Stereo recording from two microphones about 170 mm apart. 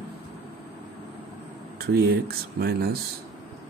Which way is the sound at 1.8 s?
70° right (ahead or behind).